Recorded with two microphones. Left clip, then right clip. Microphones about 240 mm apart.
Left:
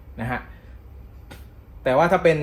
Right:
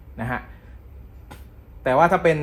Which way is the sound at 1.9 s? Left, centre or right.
Right.